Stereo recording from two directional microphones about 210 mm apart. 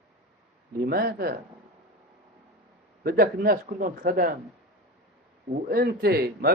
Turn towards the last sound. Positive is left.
turn(degrees=-50)  # may be behind; listen again after turning